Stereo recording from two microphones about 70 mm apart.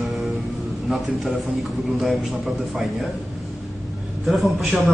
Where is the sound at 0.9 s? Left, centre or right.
Centre.